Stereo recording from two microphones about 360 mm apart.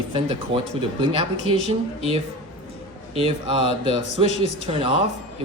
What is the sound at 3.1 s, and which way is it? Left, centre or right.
A man's voice, centre.